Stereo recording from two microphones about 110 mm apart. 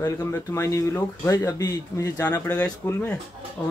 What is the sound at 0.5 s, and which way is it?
Speech, 25° left (ahead or behind).